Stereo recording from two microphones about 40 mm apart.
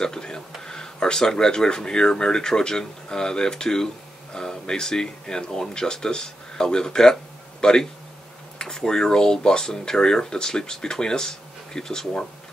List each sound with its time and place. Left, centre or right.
0.0 s speech: centre